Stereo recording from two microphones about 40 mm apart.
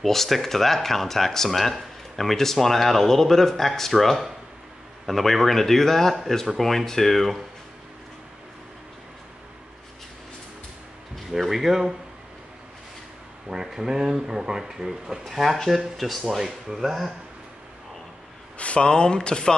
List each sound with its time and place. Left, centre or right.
0.0 s speech: centre
11.3 s speech: centre
13.5 s speech: centre
15.2 s speech: centre
16.3 s speech: centre
18.6 s speech: left
18.9 s speech: centre